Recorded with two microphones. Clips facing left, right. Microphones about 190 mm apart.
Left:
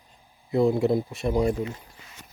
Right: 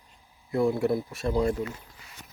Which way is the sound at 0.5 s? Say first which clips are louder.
Left 3 dB; 20° left (ahead or behind).